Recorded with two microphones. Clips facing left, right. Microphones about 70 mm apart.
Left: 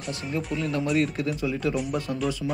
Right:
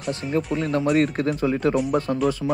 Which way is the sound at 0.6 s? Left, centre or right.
Right.